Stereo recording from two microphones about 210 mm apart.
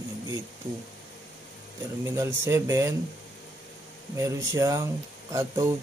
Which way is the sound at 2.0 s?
15° right (ahead or behind).